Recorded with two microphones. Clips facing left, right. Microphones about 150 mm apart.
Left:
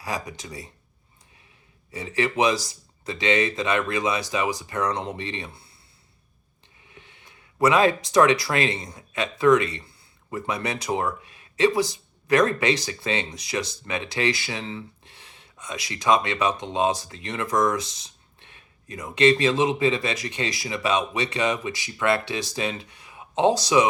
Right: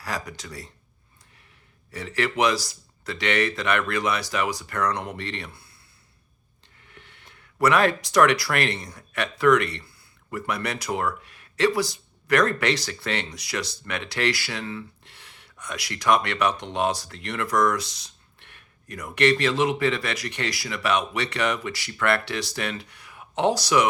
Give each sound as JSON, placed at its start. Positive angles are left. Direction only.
{"t": 0.0, "sound": "speech", "side_deg": 20}
{"t": 1.9, "sound": "speech", "side_deg": 20}
{"t": 6.8, "sound": "a sound", "side_deg": 15}
{"t": 7.3, "sound": "speech", "side_deg": 20}
{"t": 15.1, "sound": "a sound", "side_deg": 20}
{"t": 15.9, "sound": "speech", "side_deg": 20}